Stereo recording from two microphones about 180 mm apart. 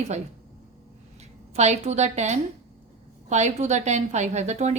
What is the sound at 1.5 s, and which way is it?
A woman's voice, 40° right (ahead or behind).